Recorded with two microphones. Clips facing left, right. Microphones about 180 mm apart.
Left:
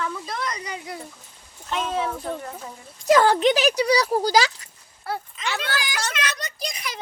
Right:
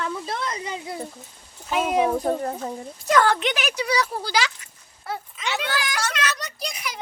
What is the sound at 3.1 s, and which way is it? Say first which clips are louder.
Speech: left 3 dB; 25° left (ahead or behind).